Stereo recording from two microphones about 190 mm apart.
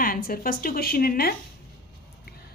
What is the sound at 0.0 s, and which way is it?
A woman's voice, 50° left (ahead or behind).